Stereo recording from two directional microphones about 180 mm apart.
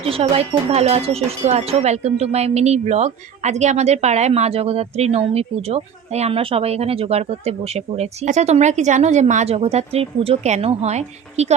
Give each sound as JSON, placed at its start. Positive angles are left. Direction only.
{"t": 0.0, "sound": "speech", "side_deg": -35}